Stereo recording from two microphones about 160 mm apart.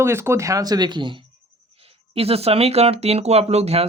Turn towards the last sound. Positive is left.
turn(degrees=-40)  # may be behind; listen again after turning